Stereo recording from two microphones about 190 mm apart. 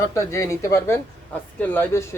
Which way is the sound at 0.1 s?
15° left (ahead or behind).